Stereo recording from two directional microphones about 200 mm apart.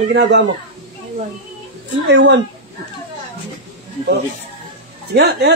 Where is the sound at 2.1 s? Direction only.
60° right (ahead or behind).